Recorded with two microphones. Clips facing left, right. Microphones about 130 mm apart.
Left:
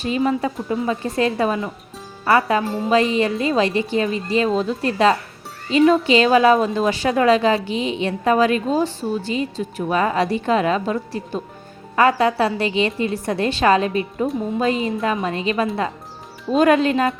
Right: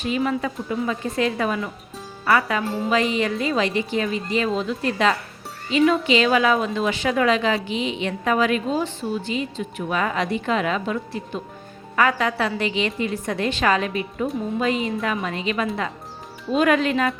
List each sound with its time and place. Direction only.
0.0 s a woman's voice: 35° left (ahead or behind)